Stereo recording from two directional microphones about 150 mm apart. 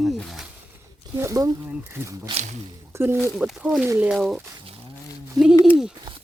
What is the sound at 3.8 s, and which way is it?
Speech, 15° right (ahead or behind).